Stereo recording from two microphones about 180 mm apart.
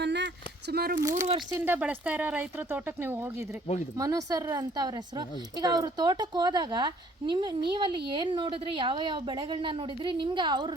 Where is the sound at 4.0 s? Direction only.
20° right (ahead or behind).